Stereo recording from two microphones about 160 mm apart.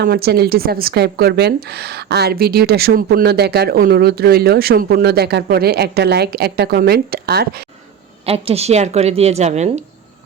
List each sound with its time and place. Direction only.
0.0 s a woman's voice: 70° right (ahead or behind)
8.2 s speech: 40° right (ahead or behind)